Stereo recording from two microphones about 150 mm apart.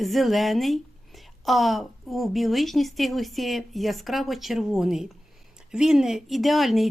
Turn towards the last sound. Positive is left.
turn(degrees=0)  # may be behind; listen again after turning